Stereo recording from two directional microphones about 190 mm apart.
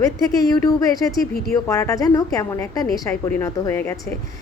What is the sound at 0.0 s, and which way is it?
A woman's voice, 20° left (ahead or behind).